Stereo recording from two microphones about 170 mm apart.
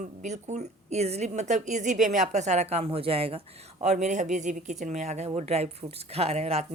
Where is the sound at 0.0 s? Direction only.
45° right (ahead or behind).